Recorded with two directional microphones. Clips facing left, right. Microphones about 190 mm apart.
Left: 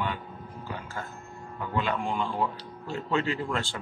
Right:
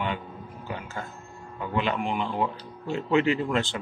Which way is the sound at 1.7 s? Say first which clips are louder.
Right 2 dB; 20° right (ahead or behind).